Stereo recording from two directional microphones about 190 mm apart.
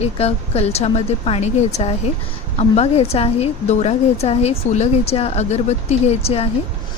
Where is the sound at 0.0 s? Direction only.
30° left (ahead or behind).